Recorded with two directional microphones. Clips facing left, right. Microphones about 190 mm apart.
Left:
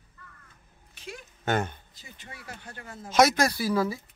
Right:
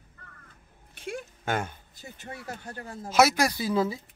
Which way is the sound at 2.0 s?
45° right (ahead or behind).